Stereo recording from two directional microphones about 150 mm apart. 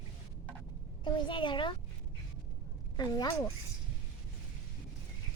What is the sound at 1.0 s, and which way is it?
Speech, 30° left (ahead or behind).